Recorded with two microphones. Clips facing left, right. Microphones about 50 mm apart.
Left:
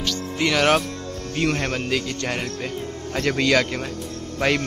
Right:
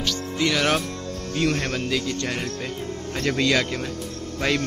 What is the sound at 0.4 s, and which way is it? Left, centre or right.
Speech, left.